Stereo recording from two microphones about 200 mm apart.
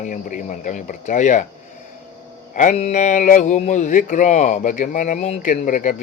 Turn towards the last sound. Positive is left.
turn(degrees=40)  # may be behind; listen again after turning